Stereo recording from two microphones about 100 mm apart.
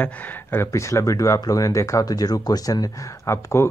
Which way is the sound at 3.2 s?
25° left (ahead or behind).